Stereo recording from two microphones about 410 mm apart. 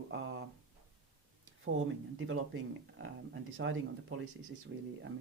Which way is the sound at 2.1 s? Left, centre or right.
Right.